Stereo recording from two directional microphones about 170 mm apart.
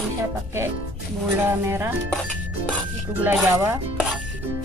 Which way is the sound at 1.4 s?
15° right (ahead or behind).